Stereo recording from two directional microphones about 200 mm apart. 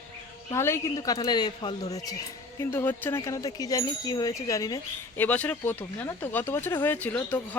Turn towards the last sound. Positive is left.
turn(degrees=10)  # may be behind; listen again after turning